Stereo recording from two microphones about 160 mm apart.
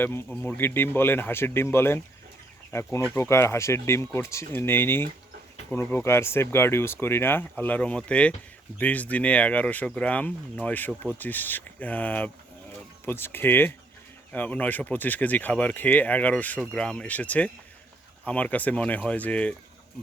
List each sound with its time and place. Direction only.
0.0 s speech: 15° left (ahead or behind)